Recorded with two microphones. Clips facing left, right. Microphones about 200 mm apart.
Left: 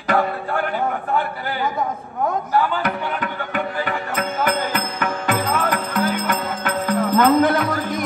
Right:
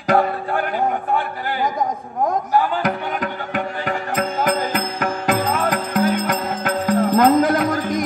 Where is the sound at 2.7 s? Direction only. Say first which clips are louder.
Right 1 dB; 40° right (ahead or behind).